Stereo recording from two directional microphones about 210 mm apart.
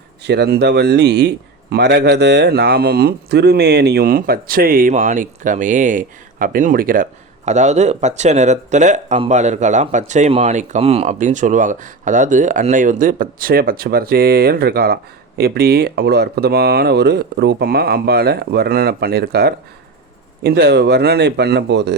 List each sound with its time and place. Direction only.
0.2 s speech: 50° right (ahead or behind)